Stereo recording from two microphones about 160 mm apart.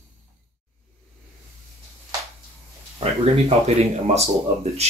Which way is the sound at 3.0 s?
40° right (ahead or behind).